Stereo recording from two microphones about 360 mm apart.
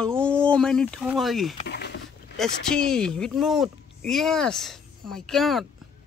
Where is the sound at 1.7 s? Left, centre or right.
Left.